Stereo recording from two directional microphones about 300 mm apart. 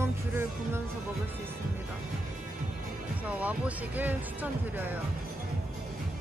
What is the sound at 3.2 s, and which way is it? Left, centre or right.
Speech, centre.